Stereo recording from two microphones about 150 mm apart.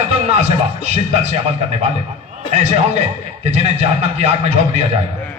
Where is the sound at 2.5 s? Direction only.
50° right (ahead or behind).